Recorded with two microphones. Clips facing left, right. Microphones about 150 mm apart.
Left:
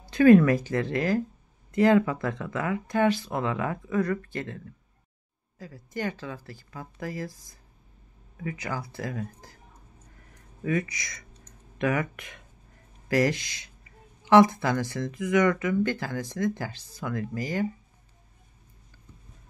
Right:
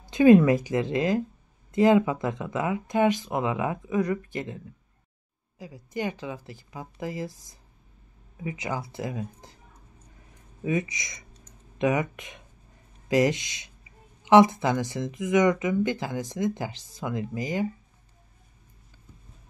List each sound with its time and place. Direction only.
0.1 s speech: 20° right (ahead or behind)
10.6 s speech: 20° right (ahead or behind)